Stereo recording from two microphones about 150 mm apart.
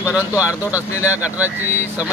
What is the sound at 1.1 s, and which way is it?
Speech, 10° right (ahead or behind).